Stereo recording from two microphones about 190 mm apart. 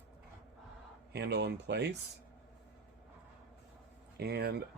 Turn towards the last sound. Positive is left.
turn(degrees=-60)  # may be behind; listen again after turning